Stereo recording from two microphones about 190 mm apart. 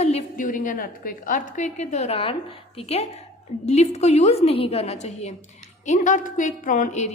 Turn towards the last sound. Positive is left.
turn(degrees=40)  # may be behind; listen again after turning